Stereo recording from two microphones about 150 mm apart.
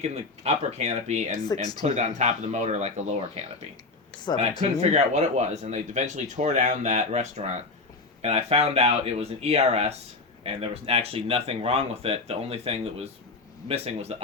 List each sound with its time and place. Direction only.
0.0 s speech: 45° right (ahead or behind)
4.8 s speech: 45° right (ahead or behind)